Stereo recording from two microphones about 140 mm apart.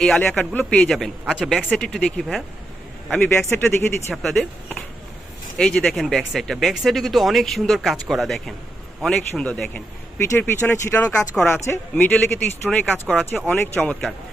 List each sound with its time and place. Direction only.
0.0 s speech: 5° left (ahead or behind)
3.1 s speech: 10° left (ahead or behind)
4.1 s speech: centre (ahead or behind)